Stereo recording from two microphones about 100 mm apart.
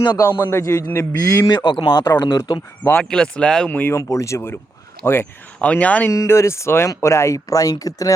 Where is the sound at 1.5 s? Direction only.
50° left (ahead or behind).